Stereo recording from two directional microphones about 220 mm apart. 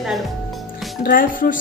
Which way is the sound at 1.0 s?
40° left (ahead or behind).